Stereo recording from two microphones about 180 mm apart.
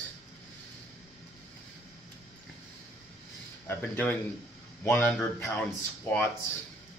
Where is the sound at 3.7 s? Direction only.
10° left (ahead or behind).